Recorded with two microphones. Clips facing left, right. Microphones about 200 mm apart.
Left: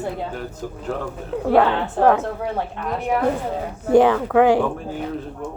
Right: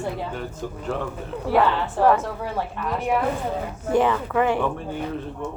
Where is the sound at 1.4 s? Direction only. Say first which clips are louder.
Left 3 dB; 70° left (ahead or behind).